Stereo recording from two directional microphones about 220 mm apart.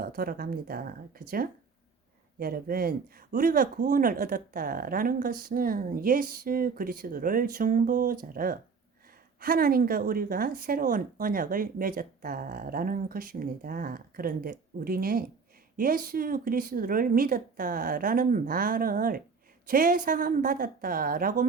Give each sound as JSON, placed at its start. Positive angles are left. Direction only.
{"t": 0.0, "sound": "a woman's voice", "side_deg": -40}